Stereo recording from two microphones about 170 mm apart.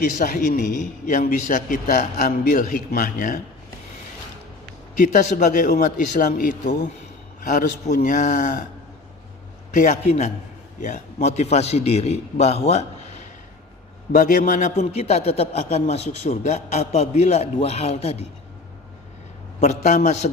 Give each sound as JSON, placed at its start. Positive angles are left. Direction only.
{"t": 0.2, "sound": "a man's voice", "side_deg": 55}
{"t": 4.9, "sound": "a man's voice", "side_deg": 50}
{"t": 9.7, "sound": "a man's voice", "side_deg": 50}
{"t": 14.1, "sound": "a man's voice", "side_deg": 55}
{"t": 19.5, "sound": "a man's voice", "side_deg": 45}